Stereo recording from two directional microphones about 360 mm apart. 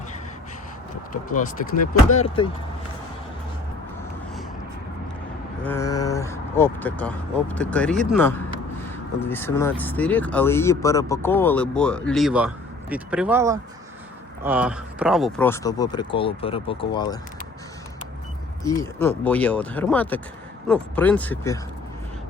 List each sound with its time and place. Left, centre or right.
2.0 s speech: centre
5.6 s speech: centre
18.6 s speech: centre